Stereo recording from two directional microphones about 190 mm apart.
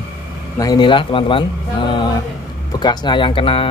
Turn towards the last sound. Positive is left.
turn(degrees=30)  # may be behind; listen again after turning